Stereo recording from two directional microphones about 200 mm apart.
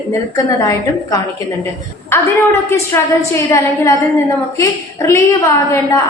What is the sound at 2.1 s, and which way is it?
A woman's voice, 10° left (ahead or behind).